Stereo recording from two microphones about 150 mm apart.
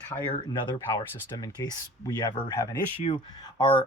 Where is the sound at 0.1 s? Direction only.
20° left (ahead or behind).